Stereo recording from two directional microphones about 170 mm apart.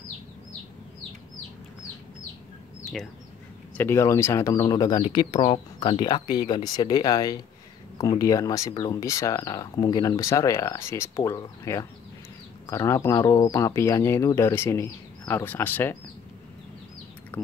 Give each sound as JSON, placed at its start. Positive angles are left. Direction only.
{"t": 3.7, "sound": "speech", "side_deg": 15}